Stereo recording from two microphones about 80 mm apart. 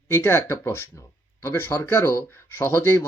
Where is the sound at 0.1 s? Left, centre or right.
Left.